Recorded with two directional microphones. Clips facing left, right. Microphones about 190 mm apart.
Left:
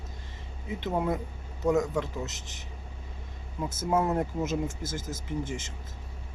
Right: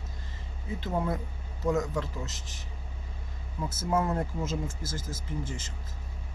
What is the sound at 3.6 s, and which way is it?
Speech, 20° left (ahead or behind).